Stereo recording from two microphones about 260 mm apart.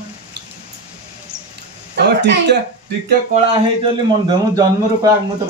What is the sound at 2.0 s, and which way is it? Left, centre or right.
Speech, right.